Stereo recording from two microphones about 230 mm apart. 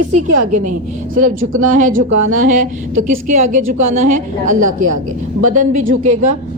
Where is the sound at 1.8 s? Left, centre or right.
Right.